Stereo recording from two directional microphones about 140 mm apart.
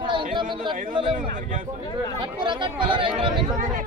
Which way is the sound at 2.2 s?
35° right (ahead or behind).